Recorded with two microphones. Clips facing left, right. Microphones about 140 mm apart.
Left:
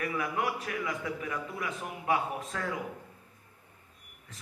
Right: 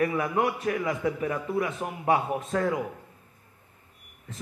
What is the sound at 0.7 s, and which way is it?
Speech, 35° right (ahead or behind).